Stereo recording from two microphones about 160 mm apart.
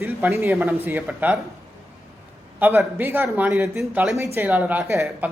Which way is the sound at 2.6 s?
15° right (ahead or behind).